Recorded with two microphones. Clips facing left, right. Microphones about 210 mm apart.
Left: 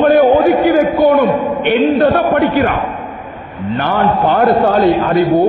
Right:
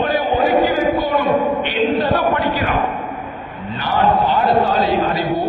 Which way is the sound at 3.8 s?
55° left (ahead or behind).